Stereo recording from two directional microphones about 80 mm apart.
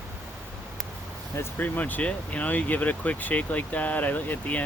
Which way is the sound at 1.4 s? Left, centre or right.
Left.